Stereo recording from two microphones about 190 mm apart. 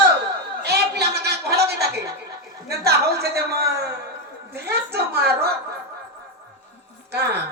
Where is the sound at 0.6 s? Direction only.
60° right (ahead or behind).